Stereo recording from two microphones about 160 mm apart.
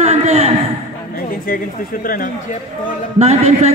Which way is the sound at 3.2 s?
40° right (ahead or behind).